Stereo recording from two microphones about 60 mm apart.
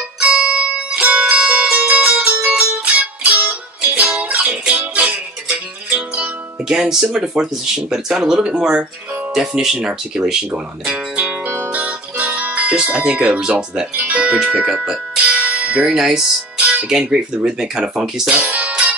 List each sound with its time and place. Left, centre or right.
0.3 s music: centre
1.6 s music: right
5.9 s speech: right
10.5 s guitar: right
12.4 s speech: right
13.9 s speech: right
15.3 s music: right
15.9 s speech: centre
16.5 s music: right
16.9 s speech: centre
18.3 s music: right